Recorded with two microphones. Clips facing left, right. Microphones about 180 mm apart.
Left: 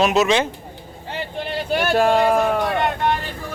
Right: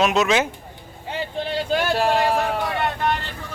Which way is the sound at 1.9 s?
45° left (ahead or behind).